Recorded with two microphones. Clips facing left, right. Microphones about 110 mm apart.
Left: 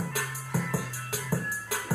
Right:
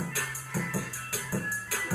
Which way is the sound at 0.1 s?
20° left (ahead or behind).